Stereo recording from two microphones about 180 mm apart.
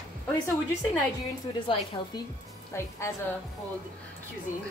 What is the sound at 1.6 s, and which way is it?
Speech, 30° left (ahead or behind).